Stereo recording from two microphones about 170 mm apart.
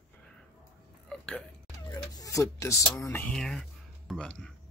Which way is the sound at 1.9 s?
20° left (ahead or behind).